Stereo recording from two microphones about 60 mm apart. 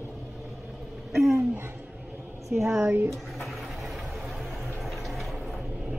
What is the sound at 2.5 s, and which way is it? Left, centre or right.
Speech, right.